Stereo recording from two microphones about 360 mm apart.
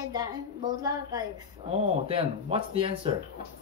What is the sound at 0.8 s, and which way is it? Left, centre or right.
Speech, centre.